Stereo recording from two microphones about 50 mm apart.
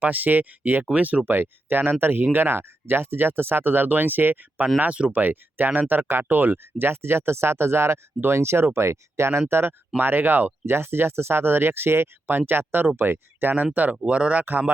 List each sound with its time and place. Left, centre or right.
0.0 s speech: right
1.2 s speech: right
5.1 s speech: right
10.0 s speech: right
14.1 s speech: right